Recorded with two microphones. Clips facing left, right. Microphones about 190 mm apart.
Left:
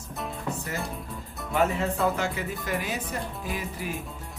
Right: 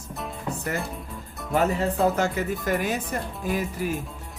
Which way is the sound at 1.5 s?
40° right (ahead or behind).